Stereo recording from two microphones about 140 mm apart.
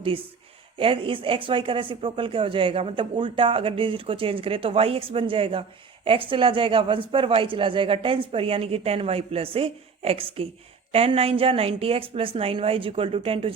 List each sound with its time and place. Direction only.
0.8 s a woman's voice: 40° right (ahead or behind)